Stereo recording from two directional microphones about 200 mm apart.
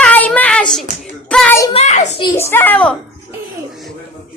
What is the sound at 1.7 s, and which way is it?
Speech, 35° left (ahead or behind).